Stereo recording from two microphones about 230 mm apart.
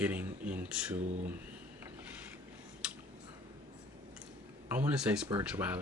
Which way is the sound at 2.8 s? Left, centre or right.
Centre.